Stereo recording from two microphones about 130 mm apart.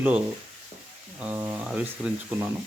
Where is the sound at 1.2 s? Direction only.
10° right (ahead or behind).